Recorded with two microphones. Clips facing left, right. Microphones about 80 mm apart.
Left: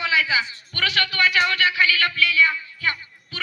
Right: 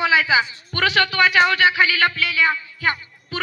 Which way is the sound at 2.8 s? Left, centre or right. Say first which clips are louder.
Right 4 dB; right.